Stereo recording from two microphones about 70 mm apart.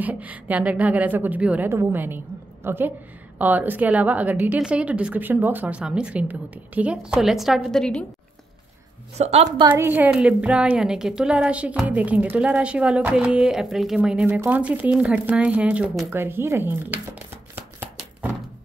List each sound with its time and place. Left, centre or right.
0.0 s a woman's voice: right
1.7 s a woman's voice: right
5.8 s a woman's voice: centre
6.2 s a woman's voice: right; by 7.8 s centre
9.8 s a woman's voice: right
10.1 s a woman's voice: centre
16.1 s speech: right